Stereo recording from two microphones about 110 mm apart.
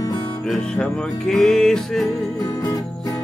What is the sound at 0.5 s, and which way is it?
Music, 10° left (ahead or behind).